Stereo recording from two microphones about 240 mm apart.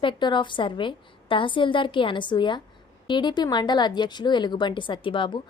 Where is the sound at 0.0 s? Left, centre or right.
Centre.